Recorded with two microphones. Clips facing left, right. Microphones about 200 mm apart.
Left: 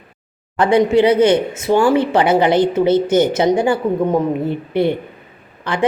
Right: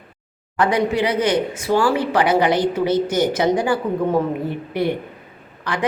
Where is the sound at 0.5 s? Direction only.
25° left (ahead or behind).